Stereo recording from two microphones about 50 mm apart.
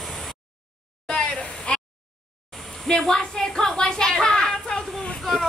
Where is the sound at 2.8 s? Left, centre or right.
Centre.